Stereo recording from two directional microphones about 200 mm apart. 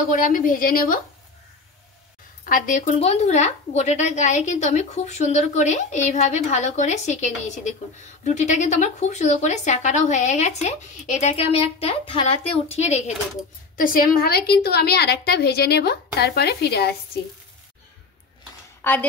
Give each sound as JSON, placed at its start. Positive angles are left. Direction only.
{"t": 0.1, "sound": "a woman's voice", "side_deg": 40}
{"t": 2.4, "sound": "speech", "side_deg": 40}
{"t": 13.7, "sound": "a woman's voice", "side_deg": 45}
{"t": 18.8, "sound": "a woman's voice", "side_deg": 10}